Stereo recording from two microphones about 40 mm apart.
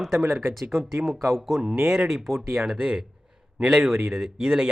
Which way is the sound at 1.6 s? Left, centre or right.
Right.